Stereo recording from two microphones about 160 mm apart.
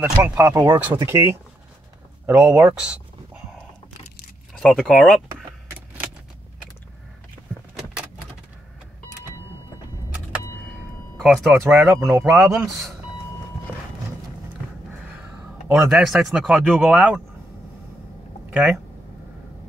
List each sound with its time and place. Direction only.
0.0 s speech: 10° right (ahead or behind)
2.2 s speech: 5° right (ahead or behind)
4.6 s speech: 5° left (ahead or behind)
11.1 s speech: centre (ahead or behind)
11.6 s speech: 15° right (ahead or behind)
15.7 s speech: 5° right (ahead or behind)
18.5 s speech: 5° right (ahead or behind)